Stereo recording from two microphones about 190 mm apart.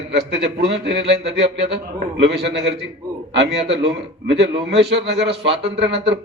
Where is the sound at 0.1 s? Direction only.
65° right (ahead or behind).